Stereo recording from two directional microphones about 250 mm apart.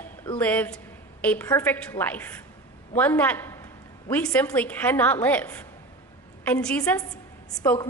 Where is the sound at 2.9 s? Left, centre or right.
Centre.